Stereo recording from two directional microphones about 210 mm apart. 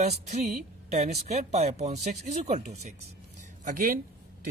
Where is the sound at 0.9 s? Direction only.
30° right (ahead or behind).